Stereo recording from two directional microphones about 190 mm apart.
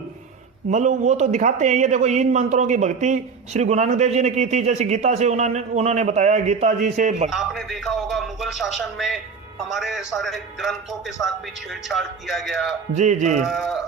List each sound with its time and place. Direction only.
0.7 s a man's voice: 40° right (ahead or behind)
7.3 s a man's voice: centre (ahead or behind)
12.9 s a man's voice: 40° right (ahead or behind)
13.4 s a man's voice: centre (ahead or behind)